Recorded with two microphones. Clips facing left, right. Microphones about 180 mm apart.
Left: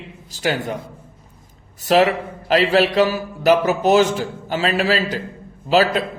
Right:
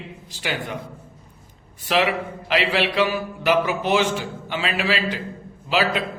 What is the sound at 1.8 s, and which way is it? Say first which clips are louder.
A man's voice: left 6 dB; 40° left (ahead or behind).